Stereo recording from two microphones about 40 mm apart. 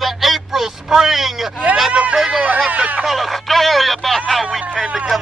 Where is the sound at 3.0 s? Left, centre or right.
Centre.